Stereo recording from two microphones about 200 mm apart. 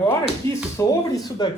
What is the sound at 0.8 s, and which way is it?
Speech, 20° left (ahead or behind).